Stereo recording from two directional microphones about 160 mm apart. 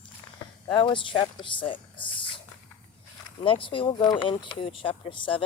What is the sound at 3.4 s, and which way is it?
Speech, 35° left (ahead or behind).